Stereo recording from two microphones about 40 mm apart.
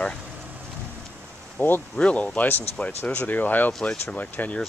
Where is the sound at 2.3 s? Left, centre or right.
Left.